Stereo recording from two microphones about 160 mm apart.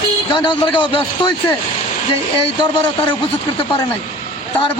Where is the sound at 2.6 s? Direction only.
30° left (ahead or behind).